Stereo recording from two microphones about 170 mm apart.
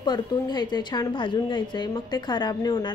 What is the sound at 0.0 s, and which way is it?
A woman's voice, 25° left (ahead or behind).